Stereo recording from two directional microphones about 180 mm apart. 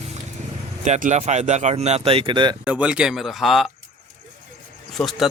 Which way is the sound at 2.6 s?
5° right (ahead or behind).